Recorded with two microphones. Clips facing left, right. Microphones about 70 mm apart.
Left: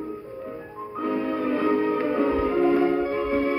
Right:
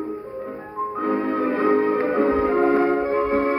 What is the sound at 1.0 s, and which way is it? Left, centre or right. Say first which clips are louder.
Music: right 3 dB; right.